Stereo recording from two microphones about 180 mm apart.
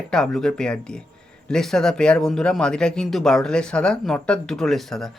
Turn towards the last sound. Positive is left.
turn(degrees=0)  # may be behind; listen again after turning